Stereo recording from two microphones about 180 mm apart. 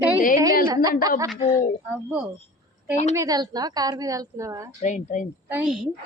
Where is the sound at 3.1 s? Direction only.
20° right (ahead or behind).